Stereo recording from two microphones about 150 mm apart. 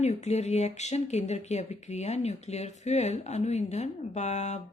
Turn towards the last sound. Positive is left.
turn(degrees=50)  # may be behind; listen again after turning